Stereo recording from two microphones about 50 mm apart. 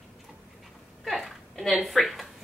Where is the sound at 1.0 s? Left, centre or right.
Centre.